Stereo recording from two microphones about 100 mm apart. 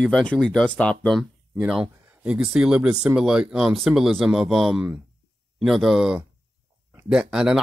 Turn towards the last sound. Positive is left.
turn(degrees=-10)  # may be behind; listen again after turning